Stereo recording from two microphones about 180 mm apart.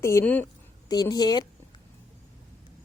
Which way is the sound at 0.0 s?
10° left (ahead or behind).